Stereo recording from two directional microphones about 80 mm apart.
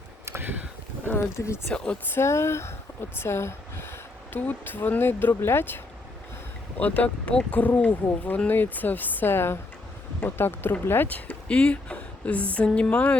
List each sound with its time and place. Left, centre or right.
0.3 s a sound: right
1.0 s speech: left
1.7 s speech: centre
2.1 s speech: left
11.4 s speech: centre